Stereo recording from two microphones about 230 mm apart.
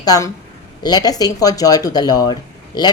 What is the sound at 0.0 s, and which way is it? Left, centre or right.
A woman's voice, centre.